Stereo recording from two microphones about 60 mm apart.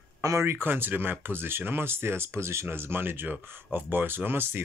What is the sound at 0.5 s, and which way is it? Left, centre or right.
Speech, right.